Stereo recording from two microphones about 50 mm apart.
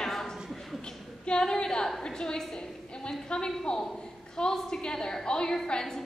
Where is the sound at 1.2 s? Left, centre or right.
Centre.